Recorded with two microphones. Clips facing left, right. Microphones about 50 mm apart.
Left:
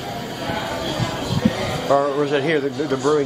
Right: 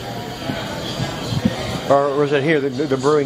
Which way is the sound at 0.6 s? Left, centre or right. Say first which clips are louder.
Left 2 dB; centre.